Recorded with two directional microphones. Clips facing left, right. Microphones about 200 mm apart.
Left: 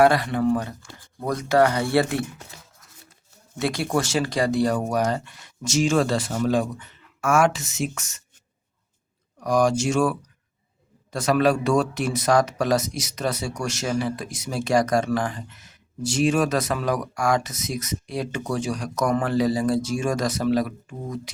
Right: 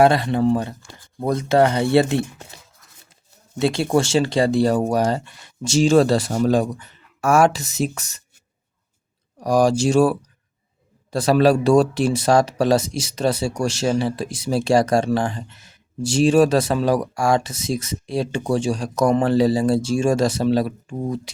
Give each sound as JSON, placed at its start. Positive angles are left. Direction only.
{"t": 0.0, "sound": "speech", "side_deg": -25}
{"t": 3.6, "sound": "speech", "side_deg": -25}
{"t": 9.4, "sound": "speech", "side_deg": -35}